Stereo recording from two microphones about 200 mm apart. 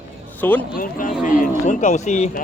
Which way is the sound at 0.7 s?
45° left (ahead or behind).